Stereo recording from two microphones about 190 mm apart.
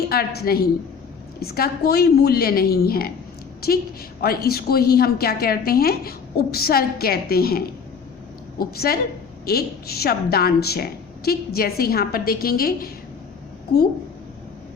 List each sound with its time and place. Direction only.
0.1 s a woman's voice: 55° left (ahead or behind)
4.2 s a woman's voice: 55° left (ahead or behind)